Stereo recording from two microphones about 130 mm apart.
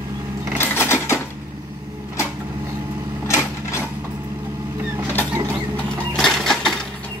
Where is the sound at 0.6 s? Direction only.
20° left (ahead or behind).